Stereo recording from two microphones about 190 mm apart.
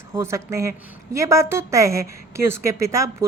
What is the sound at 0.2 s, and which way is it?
A woman's voice, 15° right (ahead or behind).